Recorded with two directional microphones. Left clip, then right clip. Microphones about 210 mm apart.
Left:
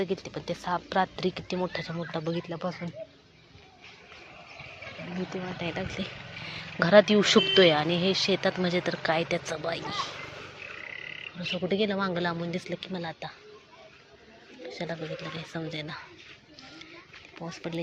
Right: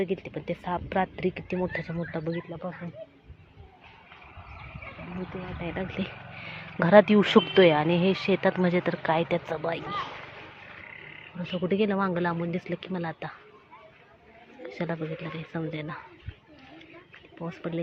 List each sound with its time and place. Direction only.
0.0 s speech: 15° right (ahead or behind)
2.5 s speech: 15° left (ahead or behind)
5.3 s speech: centre (ahead or behind)
5.7 s speech: 15° right (ahead or behind)
11.6 s speech: 15° right (ahead or behind)
14.8 s speech: 20° right (ahead or behind)
17.4 s speech: 15° right (ahead or behind)